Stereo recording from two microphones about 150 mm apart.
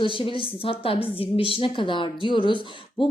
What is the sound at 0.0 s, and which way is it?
Speech, 35° left (ahead or behind).